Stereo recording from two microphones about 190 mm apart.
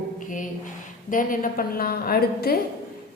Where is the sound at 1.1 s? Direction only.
45° left (ahead or behind).